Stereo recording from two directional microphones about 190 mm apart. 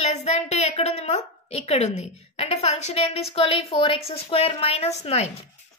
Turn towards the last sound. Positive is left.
turn(degrees=35)  # may be behind; listen again after turning